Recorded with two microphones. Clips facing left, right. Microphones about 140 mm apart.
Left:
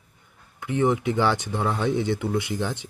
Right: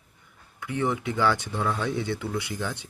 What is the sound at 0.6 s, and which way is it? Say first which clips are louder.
Speech: left 5 dB; 20° left (ahead or behind).